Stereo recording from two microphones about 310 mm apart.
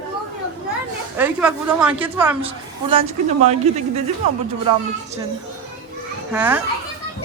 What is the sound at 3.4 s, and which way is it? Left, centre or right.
Speech, right.